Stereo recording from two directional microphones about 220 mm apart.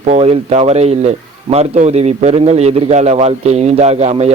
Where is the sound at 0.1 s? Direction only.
30° right (ahead or behind).